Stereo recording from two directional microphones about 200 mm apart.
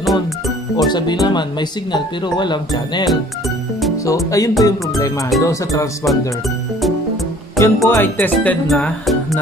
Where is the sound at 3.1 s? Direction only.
Centre (ahead or behind).